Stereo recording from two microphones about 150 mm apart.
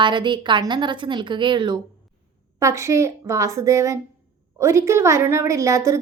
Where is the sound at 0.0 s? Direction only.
30° right (ahead or behind).